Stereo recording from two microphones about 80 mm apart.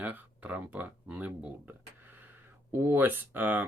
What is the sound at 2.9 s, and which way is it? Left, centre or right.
Speech, right.